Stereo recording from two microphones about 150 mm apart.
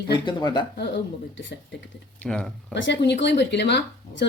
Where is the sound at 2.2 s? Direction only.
5° left (ahead or behind).